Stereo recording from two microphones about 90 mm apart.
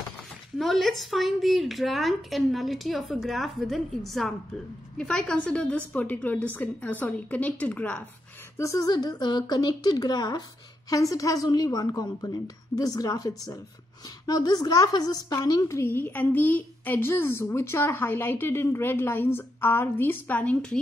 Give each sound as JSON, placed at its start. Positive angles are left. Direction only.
{"t": 0.6, "sound": "a woman's voice", "side_deg": 0}
{"t": 8.5, "sound": "a woman's voice", "side_deg": 40}
{"t": 10.9, "sound": "a woman's voice", "side_deg": 40}
{"t": 15.8, "sound": "a woman's voice", "side_deg": 25}